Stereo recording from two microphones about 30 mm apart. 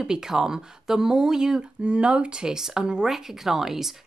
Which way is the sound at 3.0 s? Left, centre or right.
Centre.